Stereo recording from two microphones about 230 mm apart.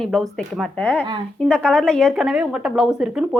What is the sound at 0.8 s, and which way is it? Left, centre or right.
A woman's voice, centre.